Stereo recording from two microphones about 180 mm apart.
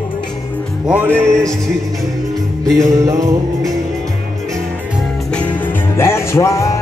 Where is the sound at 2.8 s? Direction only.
20° right (ahead or behind).